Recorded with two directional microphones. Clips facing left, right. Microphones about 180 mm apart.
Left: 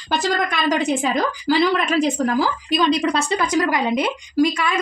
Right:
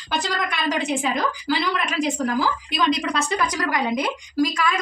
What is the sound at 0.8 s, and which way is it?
A woman's voice, 40° left (ahead or behind).